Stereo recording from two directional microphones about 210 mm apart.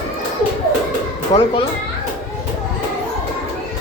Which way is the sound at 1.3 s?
25° left (ahead or behind).